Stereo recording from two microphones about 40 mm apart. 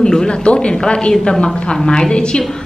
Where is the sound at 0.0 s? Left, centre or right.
Left.